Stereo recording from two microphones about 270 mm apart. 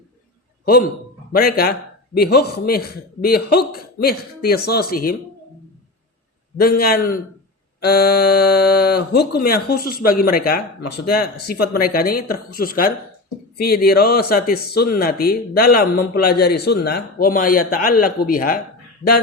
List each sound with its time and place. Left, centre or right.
0.6 s a man's voice: left
6.6 s speech: left